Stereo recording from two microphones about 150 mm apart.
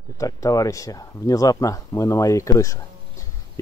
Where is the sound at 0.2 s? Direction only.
25° left (ahead or behind).